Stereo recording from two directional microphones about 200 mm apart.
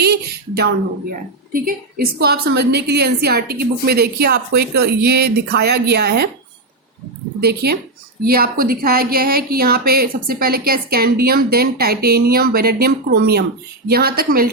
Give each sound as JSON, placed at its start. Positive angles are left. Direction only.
{"t": 0.0, "sound": "a sound", "side_deg": -55}
{"t": 1.5, "sound": "a woman's voice", "side_deg": -45}
{"t": 7.4, "sound": "a woman's voice", "side_deg": -55}